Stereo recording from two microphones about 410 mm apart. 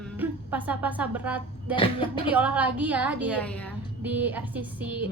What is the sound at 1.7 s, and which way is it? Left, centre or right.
Speech, centre.